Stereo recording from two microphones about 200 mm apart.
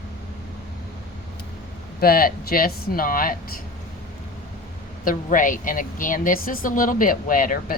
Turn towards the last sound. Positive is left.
turn(degrees=45)  # may be behind; listen again after turning